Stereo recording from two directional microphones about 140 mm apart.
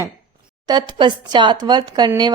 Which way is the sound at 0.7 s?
30° right (ahead or behind).